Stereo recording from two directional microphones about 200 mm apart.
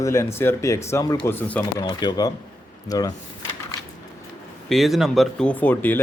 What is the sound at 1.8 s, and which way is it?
Speech, 20° left (ahead or behind).